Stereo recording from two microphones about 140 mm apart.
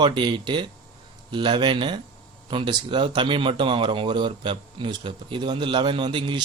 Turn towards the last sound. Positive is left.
turn(degrees=-35)  # may be behind; listen again after turning